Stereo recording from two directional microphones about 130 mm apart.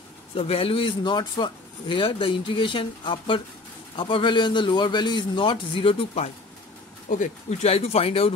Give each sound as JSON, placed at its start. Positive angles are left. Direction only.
{"t": 0.3, "sound": "speech", "side_deg": 50}
{"t": 7.1, "sound": "speech", "side_deg": 70}